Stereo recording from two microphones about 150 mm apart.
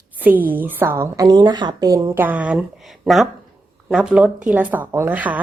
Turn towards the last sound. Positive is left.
turn(degrees=-10)  # may be behind; listen again after turning